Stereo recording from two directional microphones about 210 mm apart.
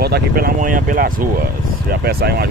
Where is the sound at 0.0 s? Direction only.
45° right (ahead or behind).